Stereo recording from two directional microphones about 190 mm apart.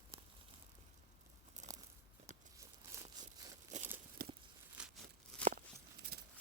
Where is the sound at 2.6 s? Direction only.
20° right (ahead or behind).